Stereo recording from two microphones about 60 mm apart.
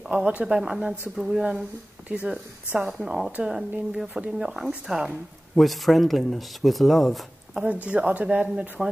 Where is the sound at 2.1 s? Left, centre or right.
Centre.